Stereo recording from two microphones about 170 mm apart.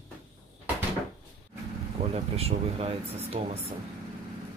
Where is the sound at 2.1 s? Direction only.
35° right (ahead or behind).